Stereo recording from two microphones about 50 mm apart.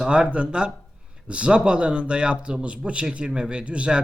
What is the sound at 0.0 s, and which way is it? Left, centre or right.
Speech, centre.